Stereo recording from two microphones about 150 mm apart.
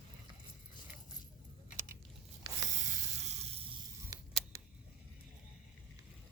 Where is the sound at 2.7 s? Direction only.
55° right (ahead or behind).